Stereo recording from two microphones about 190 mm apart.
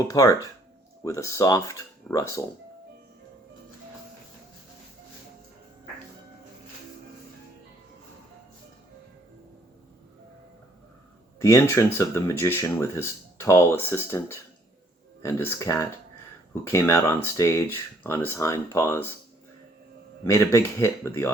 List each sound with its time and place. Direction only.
0.1 s speech: 15° left (ahead or behind)
11.3 s speech: 15° left (ahead or behind)
15.2 s speech: 15° left (ahead or behind)
20.2 s speech: 15° left (ahead or behind)